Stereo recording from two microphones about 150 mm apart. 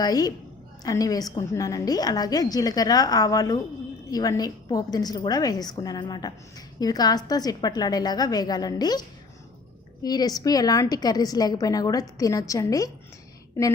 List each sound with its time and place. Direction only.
0.0 s a woman's voice: 25° left (ahead or behind)